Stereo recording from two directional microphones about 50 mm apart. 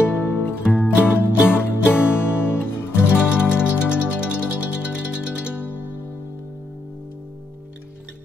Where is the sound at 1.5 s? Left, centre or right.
Left.